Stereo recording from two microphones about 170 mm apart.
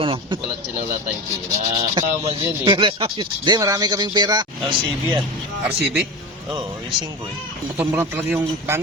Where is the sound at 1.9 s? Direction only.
25° right (ahead or behind).